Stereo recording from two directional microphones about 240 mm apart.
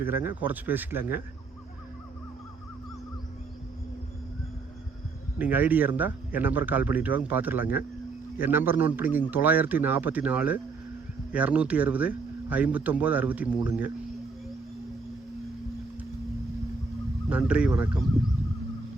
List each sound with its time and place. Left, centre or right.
0.0 s speech: centre
5.4 s speech: centre
17.2 s speech: centre